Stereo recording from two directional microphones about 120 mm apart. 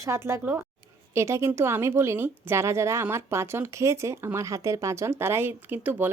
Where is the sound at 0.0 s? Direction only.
20° right (ahead or behind).